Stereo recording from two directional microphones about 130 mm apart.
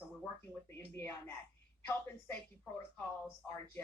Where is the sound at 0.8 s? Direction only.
20° left (ahead or behind).